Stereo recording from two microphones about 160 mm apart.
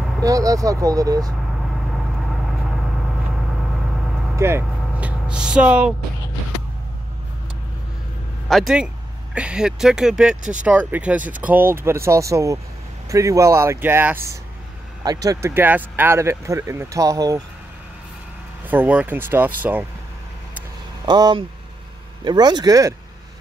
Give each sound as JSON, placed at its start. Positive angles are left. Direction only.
{"t": 0.2, "sound": "speech", "side_deg": -20}
{"t": 4.4, "sound": "speech", "side_deg": -15}
{"t": 8.5, "sound": "speech", "side_deg": 0}
{"t": 18.7, "sound": "speech", "side_deg": -10}
{"t": 21.0, "sound": "speech", "side_deg": -25}